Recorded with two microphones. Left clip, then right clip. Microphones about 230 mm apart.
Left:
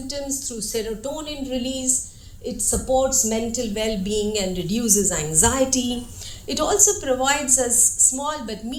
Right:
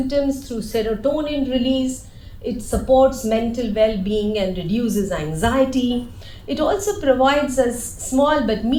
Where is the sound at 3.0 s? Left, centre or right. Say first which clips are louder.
Right 5 dB; left.